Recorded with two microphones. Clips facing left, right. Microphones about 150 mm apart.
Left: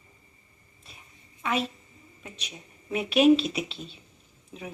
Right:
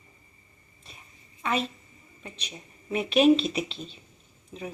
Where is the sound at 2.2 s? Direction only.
5° left (ahead or behind).